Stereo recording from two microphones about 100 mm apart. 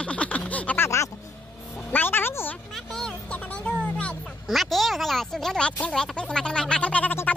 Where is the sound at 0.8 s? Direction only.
30° left (ahead or behind).